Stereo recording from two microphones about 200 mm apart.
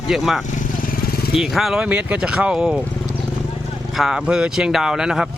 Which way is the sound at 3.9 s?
Centre (ahead or behind).